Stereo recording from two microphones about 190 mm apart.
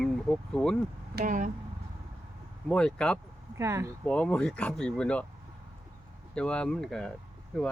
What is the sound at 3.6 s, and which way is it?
Speech, 15° right (ahead or behind).